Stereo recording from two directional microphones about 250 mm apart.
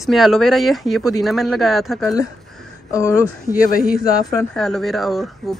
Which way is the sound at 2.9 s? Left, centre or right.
Centre.